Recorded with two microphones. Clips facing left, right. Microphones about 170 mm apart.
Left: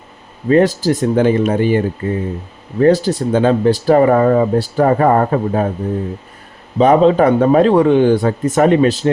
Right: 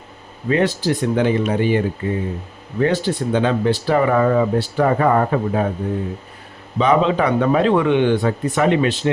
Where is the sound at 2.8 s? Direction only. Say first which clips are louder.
Left 6 dB; 40° left (ahead or behind).